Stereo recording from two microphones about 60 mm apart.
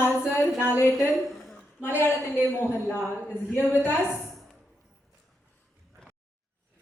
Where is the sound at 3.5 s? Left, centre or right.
Left.